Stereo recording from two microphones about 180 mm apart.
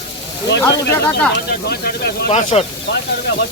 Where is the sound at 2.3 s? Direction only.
35° left (ahead or behind).